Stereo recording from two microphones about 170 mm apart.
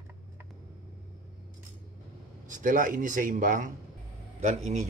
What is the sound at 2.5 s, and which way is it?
Speech, 50° right (ahead or behind).